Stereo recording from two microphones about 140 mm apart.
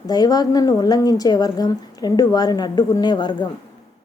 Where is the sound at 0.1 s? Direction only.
30° left (ahead or behind).